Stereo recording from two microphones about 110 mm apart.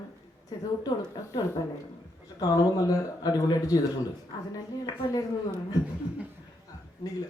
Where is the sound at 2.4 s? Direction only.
35° left (ahead or behind).